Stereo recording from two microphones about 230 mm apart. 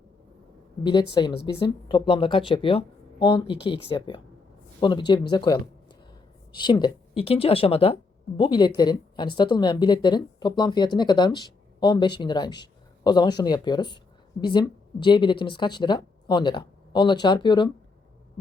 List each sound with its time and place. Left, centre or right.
1.3 s a woman's voice: left
1.5 s a woman's voice: left